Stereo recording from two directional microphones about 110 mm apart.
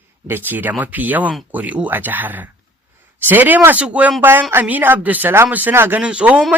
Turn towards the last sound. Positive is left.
turn(degrees=-10)  # may be behind; listen again after turning